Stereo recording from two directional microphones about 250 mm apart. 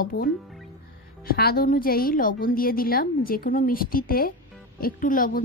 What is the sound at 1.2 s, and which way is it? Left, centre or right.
A woman's voice, left.